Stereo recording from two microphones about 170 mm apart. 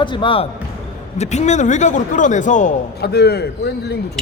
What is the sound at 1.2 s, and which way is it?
Speech, 40° left (ahead or behind).